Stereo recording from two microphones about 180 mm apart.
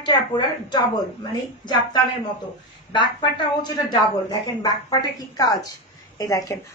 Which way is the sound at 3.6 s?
25° left (ahead or behind).